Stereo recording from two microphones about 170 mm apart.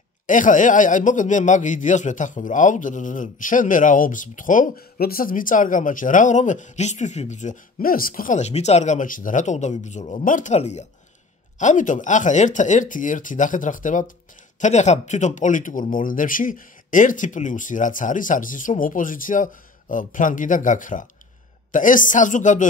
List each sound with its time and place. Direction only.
0.3 s speech: 50° left (ahead or behind)